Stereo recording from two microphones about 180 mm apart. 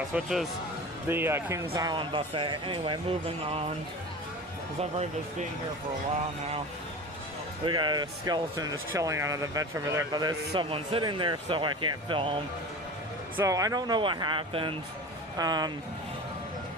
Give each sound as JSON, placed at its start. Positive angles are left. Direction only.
{"t": 0.1, "sound": "speech", "side_deg": -5}
{"t": 4.8, "sound": "speech", "side_deg": -35}
{"t": 7.6, "sound": "speech", "side_deg": -25}
{"t": 13.3, "sound": "speech", "side_deg": -20}